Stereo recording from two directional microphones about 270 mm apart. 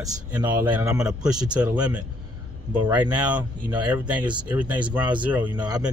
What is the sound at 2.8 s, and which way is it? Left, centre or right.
Speech, centre.